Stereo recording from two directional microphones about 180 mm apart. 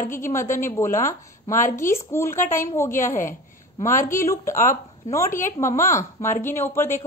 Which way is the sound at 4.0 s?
45° left (ahead or behind).